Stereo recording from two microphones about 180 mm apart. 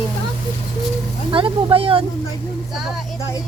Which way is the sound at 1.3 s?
30° right (ahead or behind).